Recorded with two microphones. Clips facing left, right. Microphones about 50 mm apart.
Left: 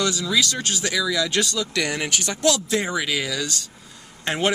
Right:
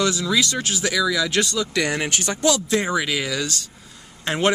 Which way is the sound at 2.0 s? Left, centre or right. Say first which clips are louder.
Right 1 dB; right.